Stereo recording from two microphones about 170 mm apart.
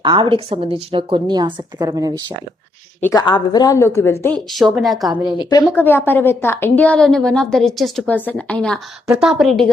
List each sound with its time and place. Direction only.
0.0 s a woman's voice: 25° right (ahead or behind)
3.0 s a woman's voice: 20° left (ahead or behind)
4.5 s speech: centre (ahead or behind)
5.4 s a woman's voice: 25° left (ahead or behind)
5.7 s a woman's voice: 10° left (ahead or behind)
9.0 s speech: 5° right (ahead or behind)